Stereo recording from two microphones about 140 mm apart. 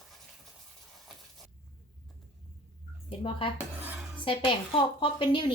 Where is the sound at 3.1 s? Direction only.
40° left (ahead or behind).